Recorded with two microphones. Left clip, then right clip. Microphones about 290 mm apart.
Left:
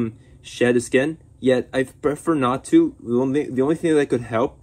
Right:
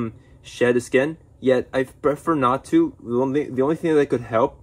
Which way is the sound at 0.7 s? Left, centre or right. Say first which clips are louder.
Even; left.